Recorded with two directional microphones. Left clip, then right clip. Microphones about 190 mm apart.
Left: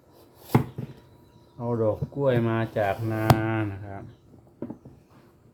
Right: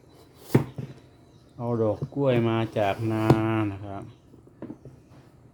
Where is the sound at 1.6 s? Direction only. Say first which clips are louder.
Even; 15° right (ahead or behind).